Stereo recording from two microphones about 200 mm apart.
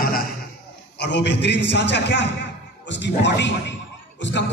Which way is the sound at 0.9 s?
60° left (ahead or behind).